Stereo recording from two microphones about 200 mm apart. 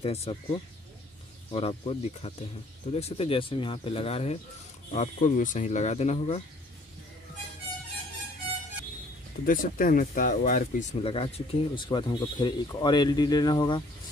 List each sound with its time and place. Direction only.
0.0 s speech: 30° left (ahead or behind)
9.5 s speech: 45° left (ahead or behind); by 13.8 s 20° left (ahead or behind)